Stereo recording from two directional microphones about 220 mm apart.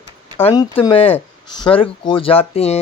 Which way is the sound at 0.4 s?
20° left (ahead or behind).